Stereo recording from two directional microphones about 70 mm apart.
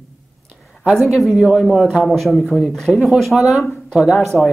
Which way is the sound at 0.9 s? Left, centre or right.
Centre.